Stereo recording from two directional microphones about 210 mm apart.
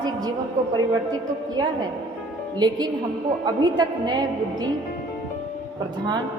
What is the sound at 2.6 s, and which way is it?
A woman's voice, 20° right (ahead or behind).